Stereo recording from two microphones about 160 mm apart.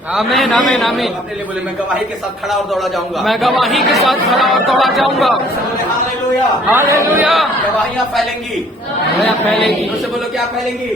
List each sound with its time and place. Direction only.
0.1 s a man's voice: centre (ahead or behind)
2.5 s a man's voice: centre (ahead or behind)
6.7 s speech: 15° right (ahead or behind)
9.2 s a man's voice: 5° left (ahead or behind)